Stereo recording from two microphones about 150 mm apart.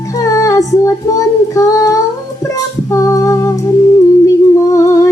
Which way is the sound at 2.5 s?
20° left (ahead or behind).